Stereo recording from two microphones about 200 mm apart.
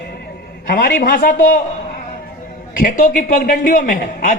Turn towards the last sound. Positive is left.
turn(degrees=40)  # may be behind; listen again after turning